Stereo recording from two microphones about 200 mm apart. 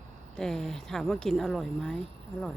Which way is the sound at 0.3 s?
5° left (ahead or behind).